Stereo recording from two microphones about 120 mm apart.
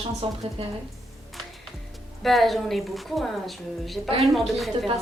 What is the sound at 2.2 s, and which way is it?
A woman's voice, centre (ahead or behind).